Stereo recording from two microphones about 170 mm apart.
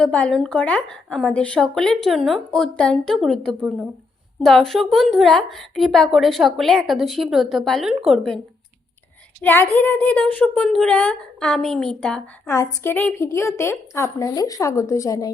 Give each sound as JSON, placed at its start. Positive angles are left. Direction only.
{"t": 0.0, "sound": "a woman's voice", "side_deg": 5}
{"t": 9.4, "sound": "a woman's voice", "side_deg": 10}
{"t": 12.5, "sound": "a woman's voice", "side_deg": 15}